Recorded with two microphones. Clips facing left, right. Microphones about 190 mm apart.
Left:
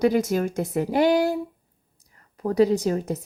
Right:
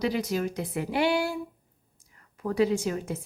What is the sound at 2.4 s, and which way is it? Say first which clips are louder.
Speech: left 5 dB; 40° left (ahead or behind).